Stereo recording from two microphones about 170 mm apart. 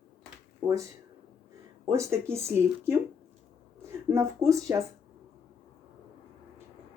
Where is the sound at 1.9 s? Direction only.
15° right (ahead or behind).